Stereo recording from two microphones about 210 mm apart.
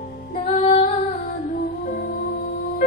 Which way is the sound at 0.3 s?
30° left (ahead or behind).